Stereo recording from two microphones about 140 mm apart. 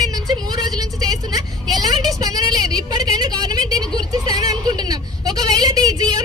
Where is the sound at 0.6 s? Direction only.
30° right (ahead or behind).